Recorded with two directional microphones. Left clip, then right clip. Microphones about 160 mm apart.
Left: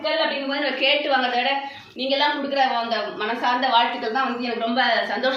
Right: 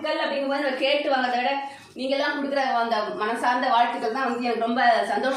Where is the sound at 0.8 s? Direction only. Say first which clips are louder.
Left 3 dB; 15° right (ahead or behind).